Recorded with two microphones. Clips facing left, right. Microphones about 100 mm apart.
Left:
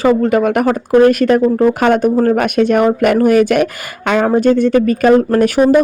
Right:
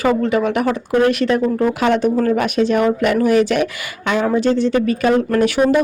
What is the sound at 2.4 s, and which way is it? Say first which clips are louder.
Speech: left 4 dB; 55° left (ahead or behind).